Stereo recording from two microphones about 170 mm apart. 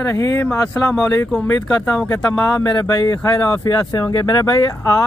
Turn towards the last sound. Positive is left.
turn(degrees=20)  # may be behind; listen again after turning